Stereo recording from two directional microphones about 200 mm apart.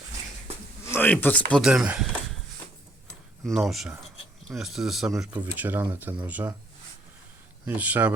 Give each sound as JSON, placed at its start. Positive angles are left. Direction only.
{"t": 0.9, "sound": "speech", "side_deg": 10}
{"t": 3.4, "sound": "speech", "side_deg": 0}
{"t": 7.7, "sound": "speech", "side_deg": -10}